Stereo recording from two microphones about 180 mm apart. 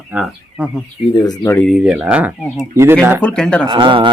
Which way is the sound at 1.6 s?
Centre (ahead or behind).